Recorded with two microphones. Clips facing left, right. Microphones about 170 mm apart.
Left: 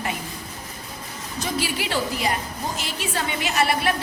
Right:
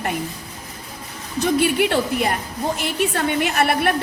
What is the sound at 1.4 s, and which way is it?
A woman's voice, 55° right (ahead or behind).